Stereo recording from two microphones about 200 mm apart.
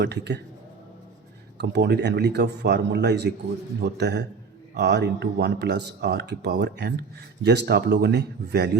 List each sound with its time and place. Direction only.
0.0 s speech: 60° right (ahead or behind)
1.5 s speech: 55° right (ahead or behind)